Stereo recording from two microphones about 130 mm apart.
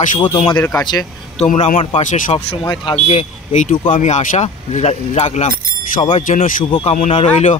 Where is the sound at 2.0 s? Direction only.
75° left (ahead or behind).